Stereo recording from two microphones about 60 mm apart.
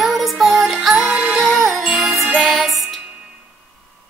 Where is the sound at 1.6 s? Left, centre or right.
Centre.